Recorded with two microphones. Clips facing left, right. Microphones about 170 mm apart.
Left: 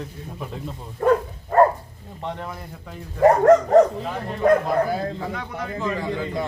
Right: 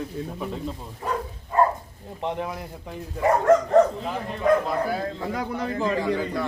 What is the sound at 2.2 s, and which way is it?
Speech, 15° right (ahead or behind).